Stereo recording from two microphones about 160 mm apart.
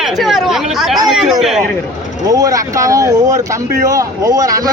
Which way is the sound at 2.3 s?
20° right (ahead or behind).